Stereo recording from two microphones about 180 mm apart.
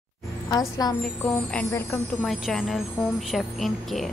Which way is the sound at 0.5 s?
20° left (ahead or behind).